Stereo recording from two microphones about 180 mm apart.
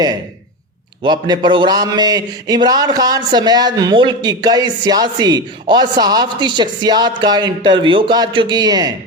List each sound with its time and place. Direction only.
1.0 s a man's voice: 25° right (ahead or behind)